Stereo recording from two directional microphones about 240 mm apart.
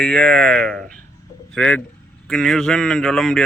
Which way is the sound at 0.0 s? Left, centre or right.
Centre.